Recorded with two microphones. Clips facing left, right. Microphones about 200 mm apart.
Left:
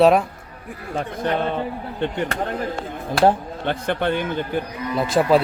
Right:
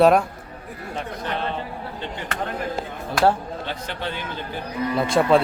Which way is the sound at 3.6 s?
55° left (ahead or behind).